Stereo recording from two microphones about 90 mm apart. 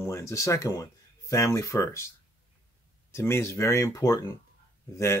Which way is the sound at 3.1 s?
30° left (ahead or behind).